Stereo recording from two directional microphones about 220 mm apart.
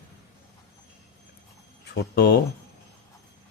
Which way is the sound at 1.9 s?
45° left (ahead or behind).